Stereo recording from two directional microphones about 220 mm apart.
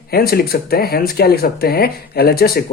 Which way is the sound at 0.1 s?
45° left (ahead or behind).